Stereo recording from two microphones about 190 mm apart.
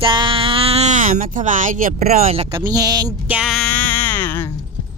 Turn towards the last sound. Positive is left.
turn(degrees=10)  # may be behind; listen again after turning